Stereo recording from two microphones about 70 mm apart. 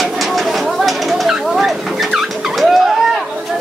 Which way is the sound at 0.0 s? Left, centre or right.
Centre.